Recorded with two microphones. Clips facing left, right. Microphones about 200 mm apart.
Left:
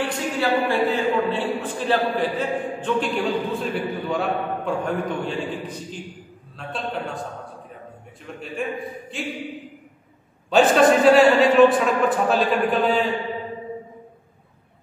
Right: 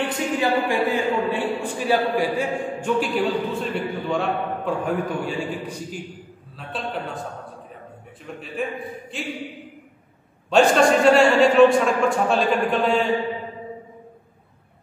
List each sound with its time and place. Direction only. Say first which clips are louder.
0.0 s a man's voice: right 1 dB; 15° right (ahead or behind)
8.3 s a man's voice: even; centre (ahead or behind)
10.5 s a man's voice: left 1 dB; centre (ahead or behind)